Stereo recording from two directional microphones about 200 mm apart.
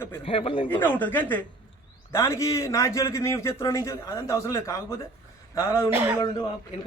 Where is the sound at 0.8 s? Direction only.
10° left (ahead or behind).